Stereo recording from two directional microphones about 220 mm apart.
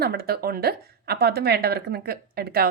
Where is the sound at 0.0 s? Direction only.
45° right (ahead or behind).